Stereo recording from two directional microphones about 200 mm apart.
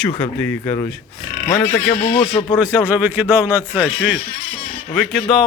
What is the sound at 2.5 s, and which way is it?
Speech, 5° right (ahead or behind).